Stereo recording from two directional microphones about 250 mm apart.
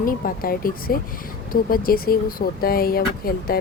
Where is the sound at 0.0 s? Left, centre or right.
Left.